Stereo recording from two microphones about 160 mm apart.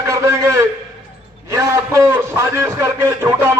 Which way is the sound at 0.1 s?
20° right (ahead or behind).